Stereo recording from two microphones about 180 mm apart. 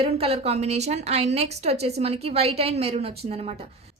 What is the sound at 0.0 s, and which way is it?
A woman's voice, 35° right (ahead or behind).